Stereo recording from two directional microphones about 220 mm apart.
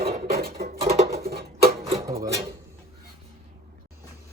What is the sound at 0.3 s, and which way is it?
Music, 45° right (ahead or behind).